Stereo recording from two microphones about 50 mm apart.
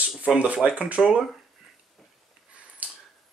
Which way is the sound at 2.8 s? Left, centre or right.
Right.